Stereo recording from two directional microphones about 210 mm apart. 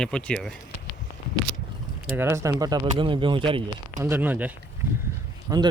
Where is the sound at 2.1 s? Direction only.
10° right (ahead or behind).